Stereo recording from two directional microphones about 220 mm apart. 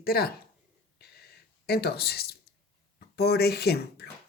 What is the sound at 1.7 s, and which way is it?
Speech, 45° left (ahead or behind).